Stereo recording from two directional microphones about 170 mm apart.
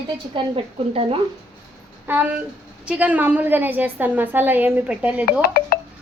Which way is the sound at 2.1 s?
10° right (ahead or behind).